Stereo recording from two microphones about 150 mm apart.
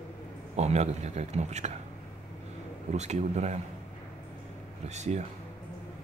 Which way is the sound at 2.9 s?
50° right (ahead or behind).